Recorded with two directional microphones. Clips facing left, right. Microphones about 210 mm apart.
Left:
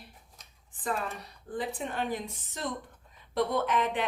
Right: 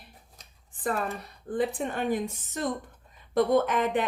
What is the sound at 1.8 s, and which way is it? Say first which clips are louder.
A woman's voice: right 5 dB; 50° right (ahead or behind).